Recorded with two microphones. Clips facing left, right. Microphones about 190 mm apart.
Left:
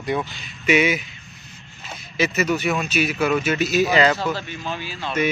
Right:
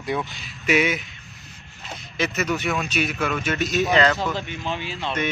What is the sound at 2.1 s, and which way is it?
Speech, 5° left (ahead or behind).